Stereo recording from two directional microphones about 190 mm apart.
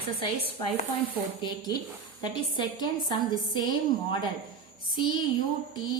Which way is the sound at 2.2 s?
25° left (ahead or behind).